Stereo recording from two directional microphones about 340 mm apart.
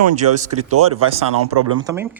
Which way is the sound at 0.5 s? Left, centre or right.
Right.